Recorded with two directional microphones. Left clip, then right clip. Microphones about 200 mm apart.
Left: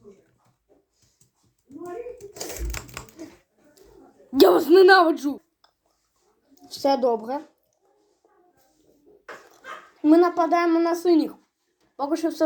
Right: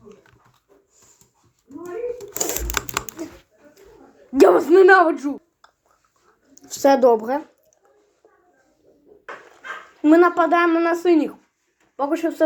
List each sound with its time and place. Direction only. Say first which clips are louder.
2.7 s typing: right 12 dB; 55° right (ahead or behind)
4.3 s a woman's voice: right 2 dB; 5° left (ahead or behind)
6.5 s a sound: right 6 dB; 25° right (ahead or behind)
10.0 s speech: right 3 dB; 5° right (ahead or behind)